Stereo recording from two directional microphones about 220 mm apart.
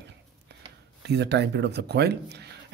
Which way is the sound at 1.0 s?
50° right (ahead or behind).